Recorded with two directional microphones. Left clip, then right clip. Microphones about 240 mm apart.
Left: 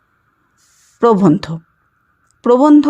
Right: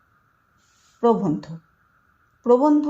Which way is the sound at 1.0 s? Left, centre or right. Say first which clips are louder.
Left 9 dB; left.